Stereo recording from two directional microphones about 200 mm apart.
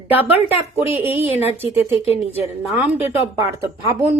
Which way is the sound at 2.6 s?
10° right (ahead or behind).